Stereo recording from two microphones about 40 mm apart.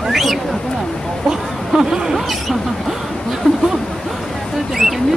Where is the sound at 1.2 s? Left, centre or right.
Centre.